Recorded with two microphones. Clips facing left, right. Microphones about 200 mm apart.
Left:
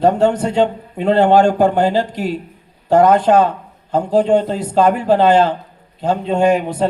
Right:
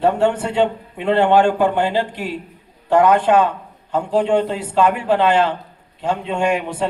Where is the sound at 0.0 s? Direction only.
40° left (ahead or behind).